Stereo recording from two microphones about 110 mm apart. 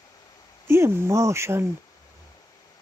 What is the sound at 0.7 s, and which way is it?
Speech, 25° right (ahead or behind).